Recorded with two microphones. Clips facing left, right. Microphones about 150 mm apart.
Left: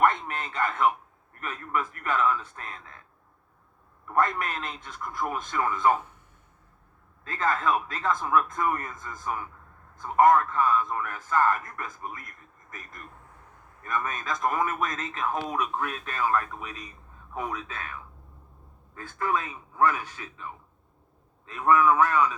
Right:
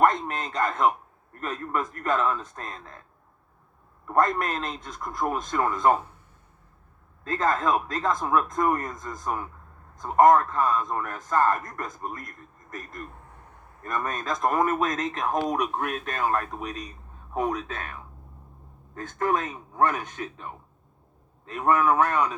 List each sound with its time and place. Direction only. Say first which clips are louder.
0.0 s speech: right 2 dB; 40° right (ahead or behind)
4.0 s a man's voice: right 3 dB; 40° right (ahead or behind)
7.3 s a man's voice: right 2 dB; 40° right (ahead or behind)
18.9 s speech: right 3 dB; 40° right (ahead or behind)
21.5 s speech: even; 35° right (ahead or behind)